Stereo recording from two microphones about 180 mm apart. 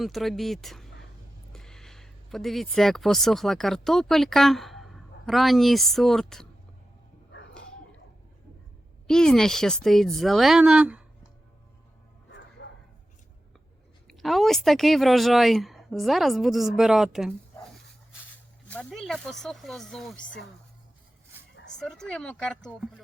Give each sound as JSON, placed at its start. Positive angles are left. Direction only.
{"t": 0.0, "sound": "a woman's voice", "side_deg": 0}
{"t": 9.0, "sound": "a woman's voice", "side_deg": 5}
{"t": 12.6, "sound": "bow-wow", "side_deg": 70}
{"t": 14.1, "sound": "a woman's voice", "side_deg": 0}
{"t": 18.7, "sound": "a woman's voice", "side_deg": 5}
{"t": 21.5, "sound": "dog", "side_deg": 80}
{"t": 21.8, "sound": "a woman's voice", "side_deg": 5}